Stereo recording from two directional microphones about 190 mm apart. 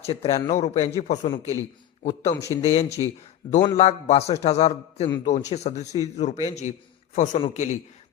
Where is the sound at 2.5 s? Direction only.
30° left (ahead or behind).